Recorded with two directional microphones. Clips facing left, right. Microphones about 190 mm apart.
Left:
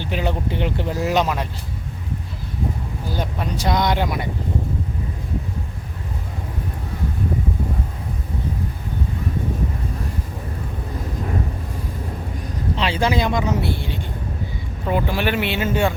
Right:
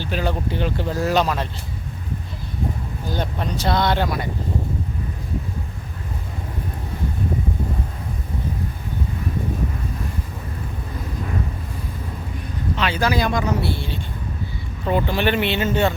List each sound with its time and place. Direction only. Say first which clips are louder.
0.0 s speech: even; 20° left (ahead or behind)
3.1 s speech: right 1 dB; 10° left (ahead or behind)
12.7 s speech: left 1 dB; 30° left (ahead or behind); by 16.0 s 10° left (ahead or behind)